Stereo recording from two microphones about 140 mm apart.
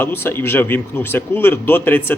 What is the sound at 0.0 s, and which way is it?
Speech, 15° left (ahead or behind).